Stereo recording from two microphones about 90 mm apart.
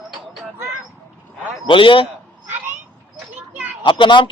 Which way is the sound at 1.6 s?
70° left (ahead or behind).